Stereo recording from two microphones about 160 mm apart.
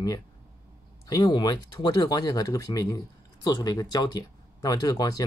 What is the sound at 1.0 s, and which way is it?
Speech, 25° left (ahead or behind).